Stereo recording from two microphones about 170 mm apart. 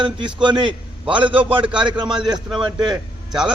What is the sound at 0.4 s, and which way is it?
Speech, 25° right (ahead or behind).